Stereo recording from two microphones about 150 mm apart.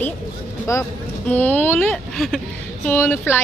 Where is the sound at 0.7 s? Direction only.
20° left (ahead or behind).